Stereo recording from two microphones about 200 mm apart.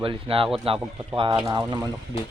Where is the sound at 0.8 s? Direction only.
5° right (ahead or behind).